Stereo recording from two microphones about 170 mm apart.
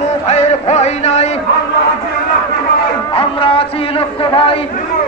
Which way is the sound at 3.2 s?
35° left (ahead or behind).